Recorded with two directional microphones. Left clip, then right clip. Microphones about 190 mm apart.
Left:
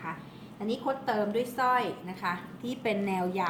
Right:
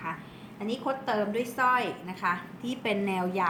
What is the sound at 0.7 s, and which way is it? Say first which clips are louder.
A woman's voice: even; 10° right (ahead or behind).